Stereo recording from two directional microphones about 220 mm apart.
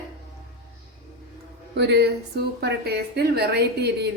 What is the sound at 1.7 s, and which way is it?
Speech, 50° right (ahead or behind).